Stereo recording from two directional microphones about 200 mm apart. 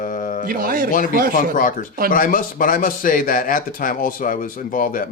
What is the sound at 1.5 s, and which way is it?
Speech, 40° left (ahead or behind).